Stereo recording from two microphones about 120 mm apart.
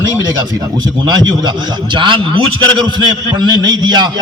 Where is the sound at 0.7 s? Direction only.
35° right (ahead or behind).